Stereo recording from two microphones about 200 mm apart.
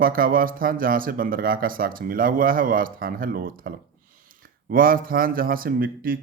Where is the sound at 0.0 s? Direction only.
45° right (ahead or behind).